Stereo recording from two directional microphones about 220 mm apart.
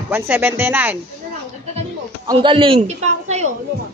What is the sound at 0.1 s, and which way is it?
Speech, 10° right (ahead or behind).